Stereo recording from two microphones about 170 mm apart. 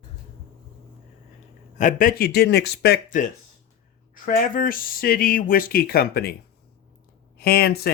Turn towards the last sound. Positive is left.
turn(degrees=65)  # may be behind; listen again after turning